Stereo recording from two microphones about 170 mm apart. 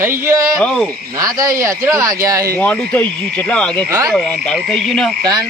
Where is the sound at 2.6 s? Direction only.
5° left (ahead or behind).